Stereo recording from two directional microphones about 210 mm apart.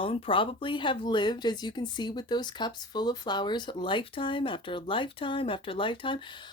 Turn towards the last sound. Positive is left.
turn(degrees=25)  # may be behind; listen again after turning